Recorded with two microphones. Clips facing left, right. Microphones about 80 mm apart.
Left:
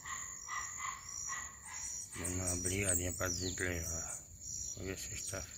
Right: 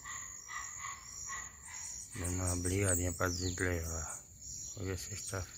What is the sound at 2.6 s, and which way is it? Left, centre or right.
Speech, right.